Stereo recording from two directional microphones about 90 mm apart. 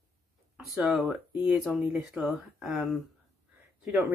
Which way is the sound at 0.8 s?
5° right (ahead or behind).